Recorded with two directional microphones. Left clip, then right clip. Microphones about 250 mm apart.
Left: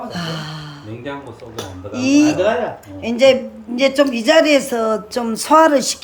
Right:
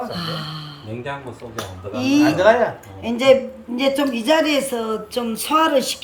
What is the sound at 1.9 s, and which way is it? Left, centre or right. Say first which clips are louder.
A woman's voice: left 3 dB; centre.